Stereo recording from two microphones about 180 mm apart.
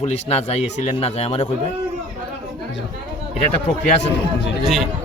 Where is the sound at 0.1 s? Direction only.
35° left (ahead or behind).